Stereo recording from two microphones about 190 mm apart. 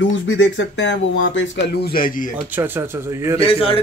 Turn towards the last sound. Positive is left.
turn(degrees=30)  # may be behind; listen again after turning